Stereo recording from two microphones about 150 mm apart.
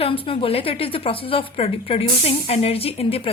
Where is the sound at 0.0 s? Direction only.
35° left (ahead or behind).